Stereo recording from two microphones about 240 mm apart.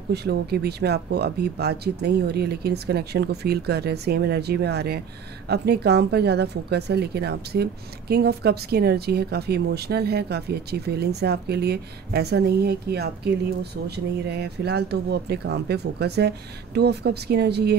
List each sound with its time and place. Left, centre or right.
0.1 s speech: right